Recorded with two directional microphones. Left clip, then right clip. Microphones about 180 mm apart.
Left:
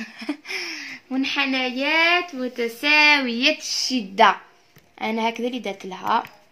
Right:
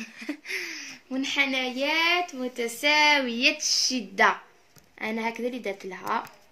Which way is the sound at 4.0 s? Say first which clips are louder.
Left 9 dB; 55° left (ahead or behind).